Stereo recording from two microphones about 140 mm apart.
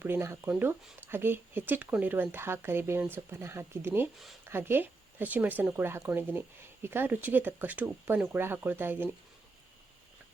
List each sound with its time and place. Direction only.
0.0 s speech: 15° right (ahead or behind)